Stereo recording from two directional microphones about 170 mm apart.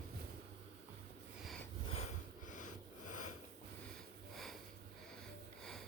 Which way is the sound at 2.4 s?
50° left (ahead or behind).